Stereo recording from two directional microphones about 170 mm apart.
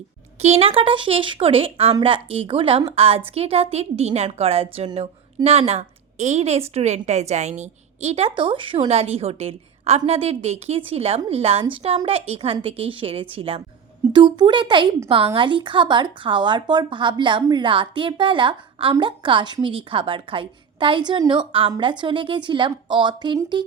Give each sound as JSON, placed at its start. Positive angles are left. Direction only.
{"t": 0.4, "sound": "a woman's voice", "side_deg": -35}